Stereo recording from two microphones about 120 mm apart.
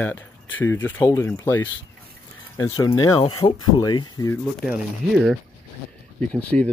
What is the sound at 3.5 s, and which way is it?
Speech, 40° left (ahead or behind).